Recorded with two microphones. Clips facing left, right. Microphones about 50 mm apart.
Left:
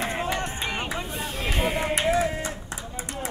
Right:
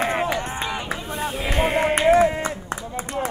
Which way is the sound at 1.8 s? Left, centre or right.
Right.